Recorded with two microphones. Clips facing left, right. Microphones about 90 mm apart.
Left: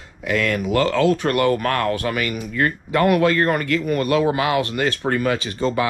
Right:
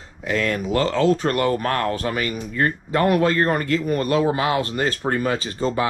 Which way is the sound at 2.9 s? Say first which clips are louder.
Left 2 dB; 65° left (ahead or behind).